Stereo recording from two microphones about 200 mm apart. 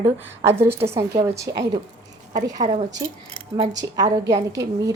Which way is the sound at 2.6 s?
20° right (ahead or behind).